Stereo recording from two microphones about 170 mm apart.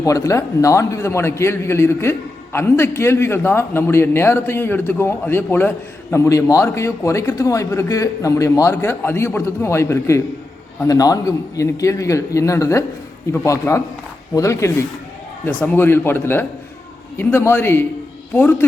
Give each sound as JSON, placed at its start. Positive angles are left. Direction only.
{"t": 0.0, "sound": "a man's voice", "side_deg": 20}